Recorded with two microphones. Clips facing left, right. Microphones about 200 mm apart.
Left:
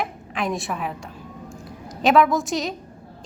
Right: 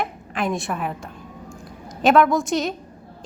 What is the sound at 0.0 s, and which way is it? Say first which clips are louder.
Speech: right 1 dB; centre (ahead or behind).